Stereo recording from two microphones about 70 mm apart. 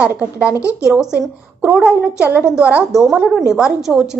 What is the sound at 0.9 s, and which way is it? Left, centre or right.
Speech, centre.